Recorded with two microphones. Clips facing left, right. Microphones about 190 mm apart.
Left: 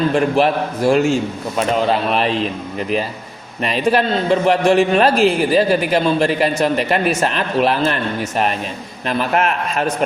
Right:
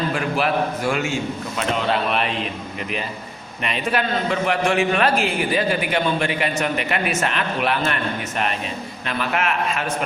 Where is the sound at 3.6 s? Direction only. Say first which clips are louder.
Left 7 dB; 35° left (ahead or behind).